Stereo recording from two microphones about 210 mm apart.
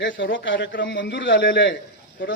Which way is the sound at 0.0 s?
60° left (ahead or behind).